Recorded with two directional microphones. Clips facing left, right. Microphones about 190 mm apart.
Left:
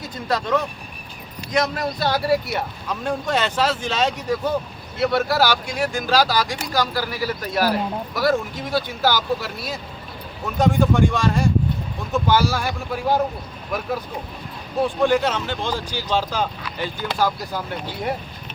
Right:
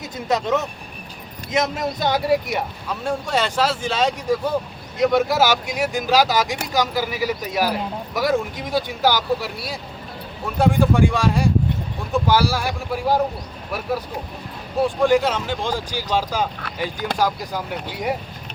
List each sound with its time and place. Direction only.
0.0 s speech: 20° right (ahead or behind)
10.8 s speech: 10° right (ahead or behind)
15.0 s speech: 10° right (ahead or behind)